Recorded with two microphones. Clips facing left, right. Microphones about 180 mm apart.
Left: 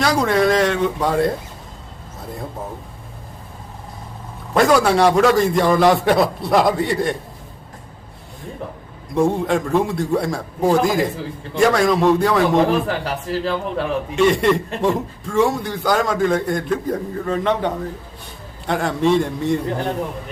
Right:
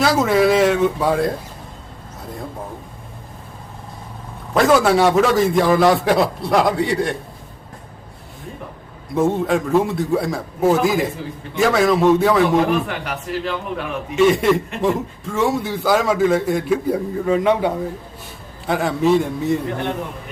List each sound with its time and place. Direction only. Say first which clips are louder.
0.0 s a man's voice: right 1 dB; 5° right (ahead or behind)
4.5 s a man's voice: even; centre (ahead or behind)
9.1 s a man's voice: even; centre (ahead or behind)
12.6 s a man's voice: left 1 dB; 35° left (ahead or behind)
14.2 s a man's voice: right 1 dB; centre (ahead or behind)